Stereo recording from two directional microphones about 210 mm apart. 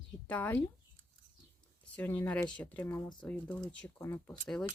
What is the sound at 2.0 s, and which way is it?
Speech, 5° left (ahead or behind).